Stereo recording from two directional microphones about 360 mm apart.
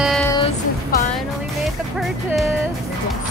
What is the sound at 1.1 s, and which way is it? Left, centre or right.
Music, centre.